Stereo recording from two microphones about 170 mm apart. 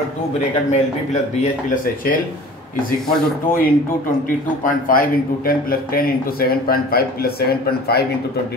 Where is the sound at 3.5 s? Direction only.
55° left (ahead or behind).